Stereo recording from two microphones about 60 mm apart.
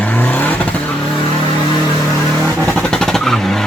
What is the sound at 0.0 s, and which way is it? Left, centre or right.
Vehicle, left.